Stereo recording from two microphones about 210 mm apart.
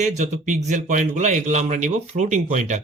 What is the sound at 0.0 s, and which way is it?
A man's voice, 35° right (ahead or behind).